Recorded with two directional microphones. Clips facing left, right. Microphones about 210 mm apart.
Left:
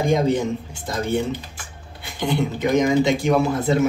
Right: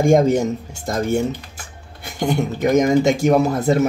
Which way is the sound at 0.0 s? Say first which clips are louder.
Right 5 dB; 45° right (ahead or behind).